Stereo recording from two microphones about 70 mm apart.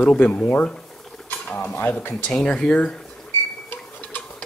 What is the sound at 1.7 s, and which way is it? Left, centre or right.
Speech, left.